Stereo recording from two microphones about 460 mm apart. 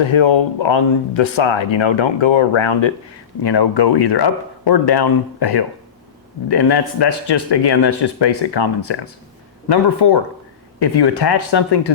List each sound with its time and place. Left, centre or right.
0.0 s speech: left
3.4 s speech: left